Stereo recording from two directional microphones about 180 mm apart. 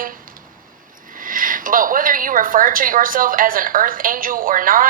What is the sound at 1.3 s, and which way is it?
A woman's voice, 50° right (ahead or behind).